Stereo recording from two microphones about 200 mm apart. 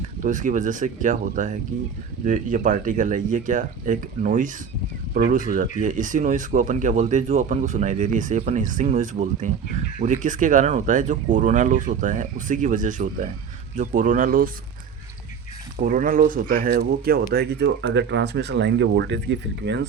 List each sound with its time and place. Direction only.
0.2 s speech: 40° right (ahead or behind)
15.8 s speech: 45° right (ahead or behind); by 19.8 s 60° right (ahead or behind)